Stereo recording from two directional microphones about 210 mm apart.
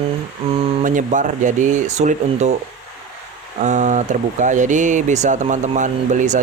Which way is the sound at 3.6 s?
35° right (ahead or behind).